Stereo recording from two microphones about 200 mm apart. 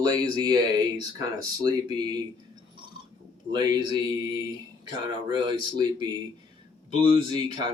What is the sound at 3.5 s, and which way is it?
Speech, 20° right (ahead or behind).